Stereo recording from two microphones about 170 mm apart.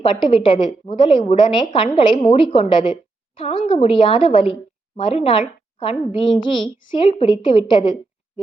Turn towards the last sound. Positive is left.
turn(degrees=30)  # may be behind; listen again after turning